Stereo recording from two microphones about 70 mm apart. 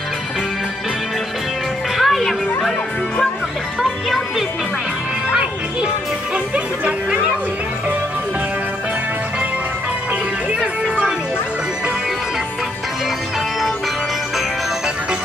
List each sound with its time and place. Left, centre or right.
2.0 s music: centre
3.8 s music: centre